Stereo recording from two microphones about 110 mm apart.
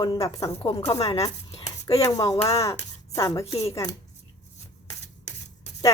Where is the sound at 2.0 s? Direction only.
35° left (ahead or behind).